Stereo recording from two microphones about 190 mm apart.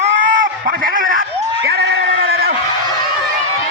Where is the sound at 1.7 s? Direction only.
60° right (ahead or behind).